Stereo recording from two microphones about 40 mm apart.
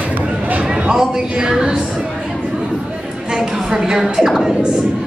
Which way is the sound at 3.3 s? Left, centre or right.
Centre.